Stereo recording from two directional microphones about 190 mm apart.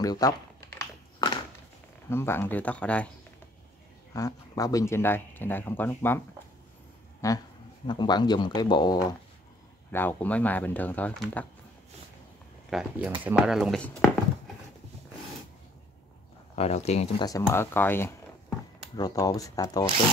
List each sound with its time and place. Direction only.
0.0 s speech: 20° left (ahead or behind)
2.0 s speech: 10° left (ahead or behind)
4.1 s speech: 20° left (ahead or behind)
9.8 s speech: 10° left (ahead or behind)
12.6 s speech: centre (ahead or behind)
16.5 s speech: 35° left (ahead or behind)
17.2 s speech: 15° left (ahead or behind)